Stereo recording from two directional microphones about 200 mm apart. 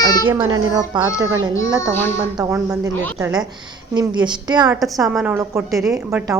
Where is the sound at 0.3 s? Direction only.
20° right (ahead or behind).